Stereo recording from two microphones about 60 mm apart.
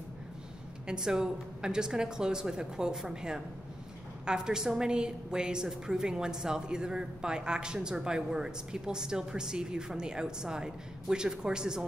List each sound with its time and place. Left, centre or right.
0.8 s a woman's voice: centre